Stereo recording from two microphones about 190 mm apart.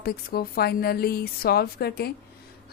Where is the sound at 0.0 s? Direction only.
55° left (ahead or behind).